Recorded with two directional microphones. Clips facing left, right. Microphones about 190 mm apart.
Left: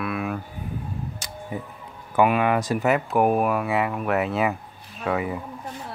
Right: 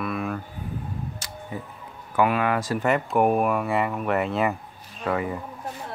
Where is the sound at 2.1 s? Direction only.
20° left (ahead or behind).